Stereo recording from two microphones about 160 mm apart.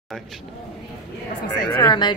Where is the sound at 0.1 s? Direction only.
5° left (ahead or behind).